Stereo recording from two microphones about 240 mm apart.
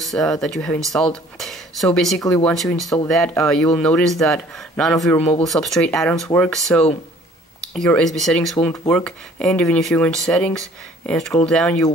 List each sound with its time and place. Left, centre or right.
0.0 s speech: centre